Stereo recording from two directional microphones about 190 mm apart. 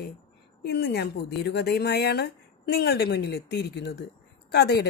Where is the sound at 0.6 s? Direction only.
60° left (ahead or behind).